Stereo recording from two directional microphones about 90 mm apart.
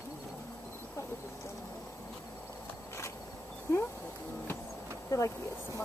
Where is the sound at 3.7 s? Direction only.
30° left (ahead or behind).